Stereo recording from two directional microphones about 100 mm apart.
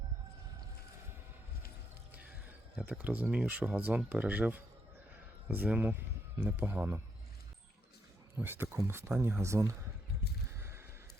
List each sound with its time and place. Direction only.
2.7 s speech: 10° right (ahead or behind)
8.4 s speech: 20° right (ahead or behind)
10.5 s a sound: 25° right (ahead or behind)